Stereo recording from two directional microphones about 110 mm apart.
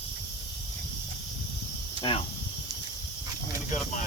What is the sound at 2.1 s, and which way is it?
Speech, 70° left (ahead or behind).